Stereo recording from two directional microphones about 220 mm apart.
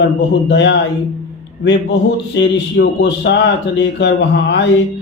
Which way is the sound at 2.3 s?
50° left (ahead or behind).